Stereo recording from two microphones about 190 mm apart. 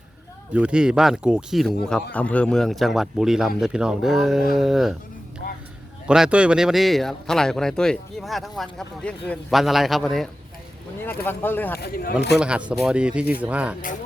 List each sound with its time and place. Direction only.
0.5 s speech: 5° right (ahead or behind)
5.4 s a sound: 55° left (ahead or behind)
6.1 s speech: 5° right (ahead or behind)
11.8 s speech: 55° left (ahead or behind)
12.4 s speech: 5° right (ahead or behind)